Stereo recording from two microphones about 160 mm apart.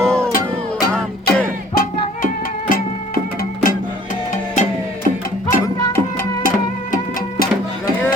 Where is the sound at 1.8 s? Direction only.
60° left (ahead or behind).